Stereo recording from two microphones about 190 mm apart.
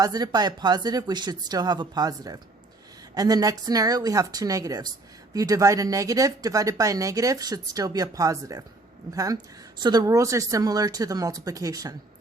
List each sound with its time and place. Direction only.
0.0 s speech: 20° right (ahead or behind)